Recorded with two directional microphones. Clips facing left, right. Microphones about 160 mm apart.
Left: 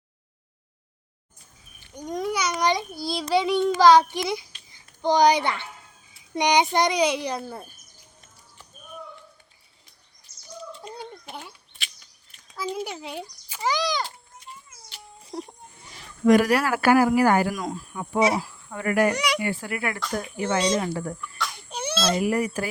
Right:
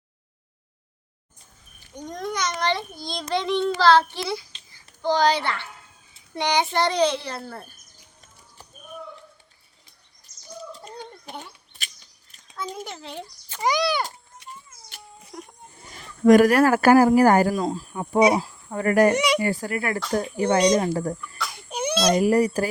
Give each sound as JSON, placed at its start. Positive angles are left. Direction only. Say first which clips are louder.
{"t": 2.0, "sound": "a child's voice", "louder": "left 2 dB", "side_deg": 10}
{"t": 10.3, "sound": "bird", "louder": "even", "side_deg": 30}
{"t": 10.8, "sound": "a sound", "louder": "left 1 dB", "side_deg": 0}
{"t": 12.5, "sound": "a child's voice", "louder": "left 3 dB", "side_deg": 5}
{"t": 13.6, "sound": "a child's voice", "louder": "right 3 dB", "side_deg": -15}
{"t": 14.4, "sound": "a sound", "louder": "right 2 dB", "side_deg": -70}
{"t": 15.3, "sound": "a sound", "louder": "left 6 dB", "side_deg": 30}
{"t": 15.8, "sound": "speech", "louder": "right 3 dB", "side_deg": -45}
{"t": 17.6, "sound": "speech", "louder": "right 5 dB", "side_deg": -30}
{"t": 18.2, "sound": "speech", "louder": "right 4 dB", "side_deg": -20}
{"t": 19.1, "sound": "speech", "louder": "right 5 dB", "side_deg": -20}
{"t": 19.4, "sound": "speech", "louder": "right 3 dB", "side_deg": -40}
{"t": 21.7, "sound": "baby cry", "louder": "right 5 dB", "side_deg": -10}
{"t": 22.2, "sound": "speech", "louder": "right 5 dB", "side_deg": -35}